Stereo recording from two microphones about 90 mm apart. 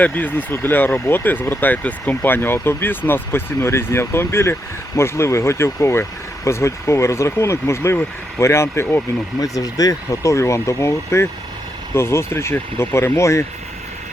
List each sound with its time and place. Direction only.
0.0 s speech: 20° left (ahead or behind)
9.4 s speech: 40° left (ahead or behind)